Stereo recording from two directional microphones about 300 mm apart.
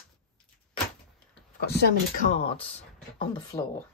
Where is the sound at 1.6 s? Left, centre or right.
Left.